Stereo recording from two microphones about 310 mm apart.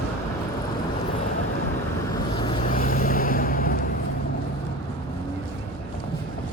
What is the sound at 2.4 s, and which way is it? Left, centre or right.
Vehicle, left.